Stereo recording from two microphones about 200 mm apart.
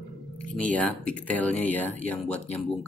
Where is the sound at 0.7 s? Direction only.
5° left (ahead or behind).